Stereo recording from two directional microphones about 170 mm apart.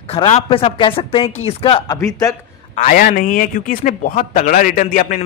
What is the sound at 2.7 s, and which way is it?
A man's voice, 50° left (ahead or behind).